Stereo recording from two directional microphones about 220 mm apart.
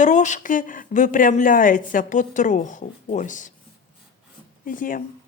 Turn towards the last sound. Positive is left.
turn(degrees=40)  # may be behind; listen again after turning